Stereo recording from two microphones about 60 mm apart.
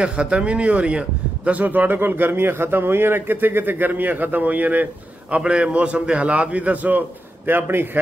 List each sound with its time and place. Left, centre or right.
0.0 s a man's voice: centre; by 8.0 s right